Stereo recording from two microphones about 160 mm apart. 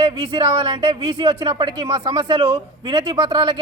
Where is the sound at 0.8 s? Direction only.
35° right (ahead or behind).